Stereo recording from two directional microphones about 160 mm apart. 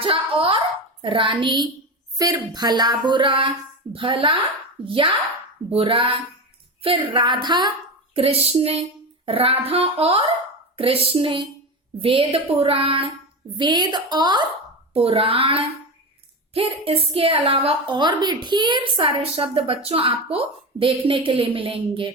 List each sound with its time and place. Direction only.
0.0 s a sound: 35° right (ahead or behind)
1.0 s a woman's voice: 35° right (ahead or behind)
8.1 s a woman's voice: 40° right (ahead or behind)
14.9 s a woman's voice: 40° right (ahead or behind)